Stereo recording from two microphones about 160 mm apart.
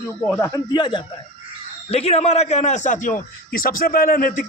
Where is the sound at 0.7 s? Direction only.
30° left (ahead or behind).